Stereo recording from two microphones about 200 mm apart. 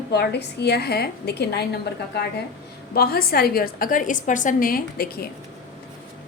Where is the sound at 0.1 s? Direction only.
55° left (ahead or behind).